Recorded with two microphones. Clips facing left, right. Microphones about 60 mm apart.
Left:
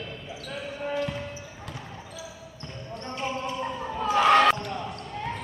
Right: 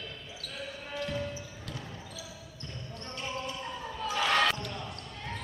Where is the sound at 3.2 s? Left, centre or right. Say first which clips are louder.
Left 7 dB; left.